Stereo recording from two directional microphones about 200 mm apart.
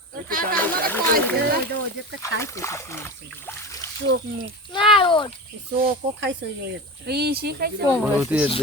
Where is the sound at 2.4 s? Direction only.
15° left (ahead or behind).